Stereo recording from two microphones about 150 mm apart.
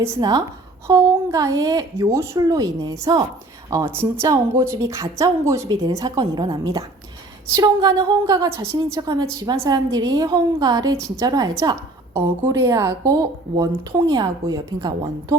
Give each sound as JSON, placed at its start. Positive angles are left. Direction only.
{"t": 0.0, "sound": "a woman's voice", "side_deg": -20}